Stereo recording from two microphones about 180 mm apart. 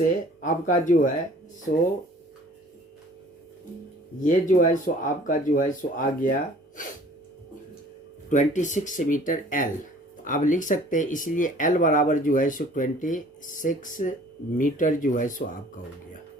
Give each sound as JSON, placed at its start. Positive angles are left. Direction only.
{"t": 0.0, "sound": "speech", "side_deg": 45}
{"t": 4.2, "sound": "speech", "side_deg": 45}
{"t": 8.3, "sound": "speech", "side_deg": 45}